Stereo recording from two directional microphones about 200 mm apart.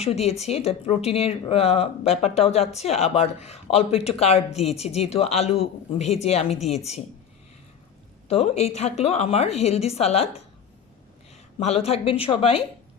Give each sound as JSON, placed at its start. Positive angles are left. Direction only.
{"t": 0.0, "sound": "speech", "side_deg": 30}
{"t": 8.3, "sound": "speech", "side_deg": 30}
{"t": 11.6, "sound": "a woman's voice", "side_deg": 30}